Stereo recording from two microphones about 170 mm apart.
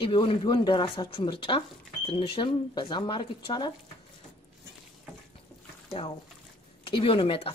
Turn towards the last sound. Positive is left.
turn(degrees=35)  # may be behind; listen again after turning